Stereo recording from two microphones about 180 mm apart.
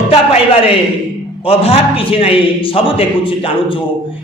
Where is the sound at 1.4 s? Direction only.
30° left (ahead or behind).